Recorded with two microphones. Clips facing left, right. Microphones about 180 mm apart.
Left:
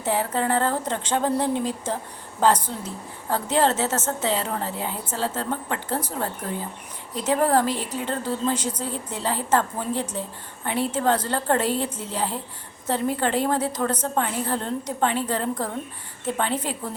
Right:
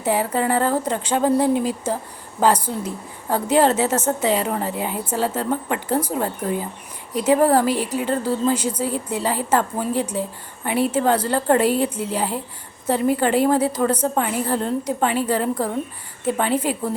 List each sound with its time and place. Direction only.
0.0 s a woman's voice: 10° right (ahead or behind)